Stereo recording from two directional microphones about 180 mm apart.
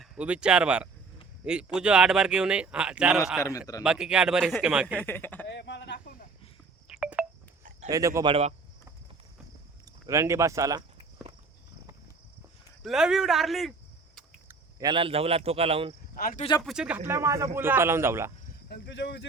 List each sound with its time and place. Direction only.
0.0 s speech: 5° right (ahead or behind)
5.0 s speech: 10° left (ahead or behind)
5.5 s a sound: 75° left (ahead or behind)
6.8 s a sound: 5° right (ahead or behind)
7.9 s speech: 20° right (ahead or behind)
8.3 s speech: 35° right (ahead or behind)
10.1 s speech: 15° right (ahead or behind)
12.8 s speech: 5° right (ahead or behind)
14.4 s a sound: 20° right (ahead or behind)
14.9 s speech: 30° right (ahead or behind)
16.1 s speech: 55° left (ahead or behind)
16.6 s speech: 5° right (ahead or behind)
17.1 s speech: 15° right (ahead or behind)
18.7 s speech: 75° left (ahead or behind)